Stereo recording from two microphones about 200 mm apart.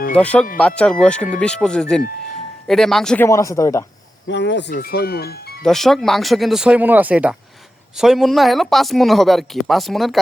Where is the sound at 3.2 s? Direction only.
15° left (ahead or behind).